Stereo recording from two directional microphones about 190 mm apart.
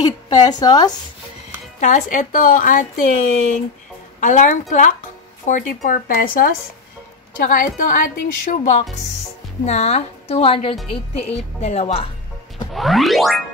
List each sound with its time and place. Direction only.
0.0 s a woman's voice: 20° left (ahead or behind)
1.8 s a woman's voice: 40° left (ahead or behind)
12.7 s music: centre (ahead or behind)